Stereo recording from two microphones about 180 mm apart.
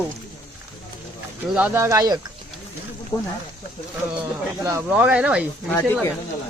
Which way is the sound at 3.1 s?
20° left (ahead or behind).